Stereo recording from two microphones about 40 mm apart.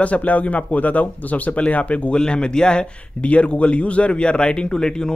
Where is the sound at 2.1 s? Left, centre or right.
Left.